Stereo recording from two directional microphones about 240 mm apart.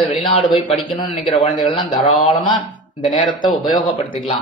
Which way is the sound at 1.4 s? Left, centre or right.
Left.